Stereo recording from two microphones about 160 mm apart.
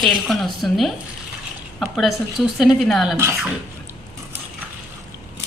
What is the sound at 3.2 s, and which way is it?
Speech, 15° right (ahead or behind).